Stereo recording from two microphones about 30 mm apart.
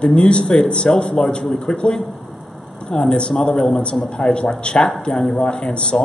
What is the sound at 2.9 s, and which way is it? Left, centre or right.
A man's voice, left.